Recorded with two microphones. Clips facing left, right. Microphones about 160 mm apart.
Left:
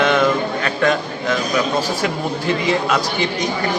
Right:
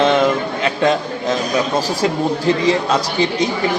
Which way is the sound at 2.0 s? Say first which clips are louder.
Right 4 dB; 35° right (ahead or behind).